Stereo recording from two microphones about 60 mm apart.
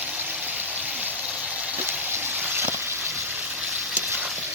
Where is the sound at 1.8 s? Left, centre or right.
Right.